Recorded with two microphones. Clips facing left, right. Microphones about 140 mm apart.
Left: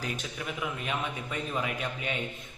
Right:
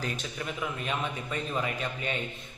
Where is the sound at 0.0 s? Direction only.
10° left (ahead or behind).